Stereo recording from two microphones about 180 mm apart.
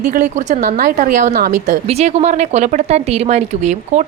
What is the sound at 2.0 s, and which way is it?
A woman's voice, 40° right (ahead or behind).